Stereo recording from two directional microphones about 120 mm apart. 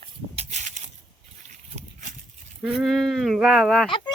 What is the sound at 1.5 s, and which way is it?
Goat, 85° right.